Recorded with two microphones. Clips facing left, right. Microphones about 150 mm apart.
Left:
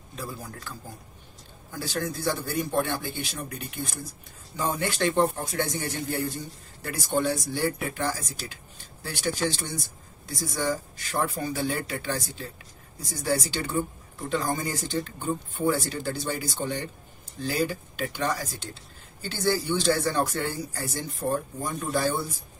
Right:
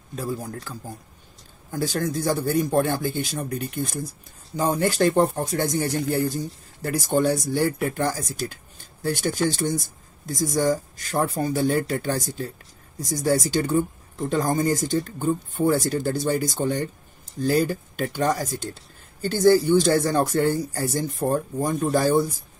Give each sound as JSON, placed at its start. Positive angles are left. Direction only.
{"t": 0.1, "sound": "speech", "side_deg": -40}